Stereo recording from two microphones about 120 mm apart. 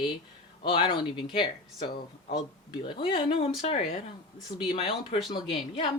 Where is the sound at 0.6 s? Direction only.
45° left (ahead or behind).